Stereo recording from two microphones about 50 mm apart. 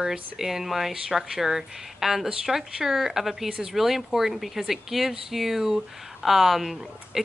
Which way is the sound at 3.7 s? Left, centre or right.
Centre.